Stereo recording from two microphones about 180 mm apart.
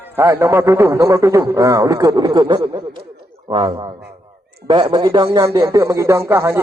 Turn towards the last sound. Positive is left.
turn(degrees=-15)  # may be behind; listen again after turning